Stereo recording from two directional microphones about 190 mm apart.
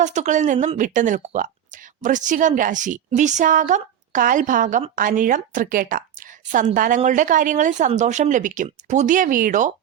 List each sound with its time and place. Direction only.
0.0 s a woman's voice: 40° right (ahead or behind)